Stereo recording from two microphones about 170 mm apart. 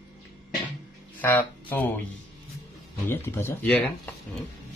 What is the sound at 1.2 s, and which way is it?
Speech, 10° left (ahead or behind).